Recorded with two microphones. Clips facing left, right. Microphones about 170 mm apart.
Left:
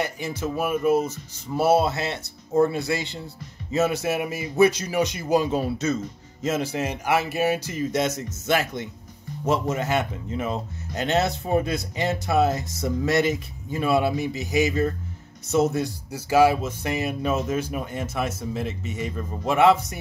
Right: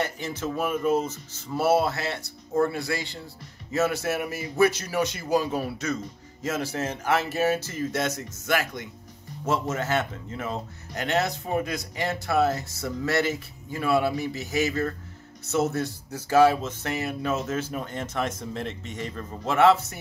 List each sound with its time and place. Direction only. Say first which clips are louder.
0.0 s speech: left 2 dB; 10° left (ahead or behind)